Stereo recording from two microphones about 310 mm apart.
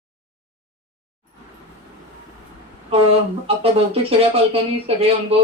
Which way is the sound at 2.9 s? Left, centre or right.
Centre.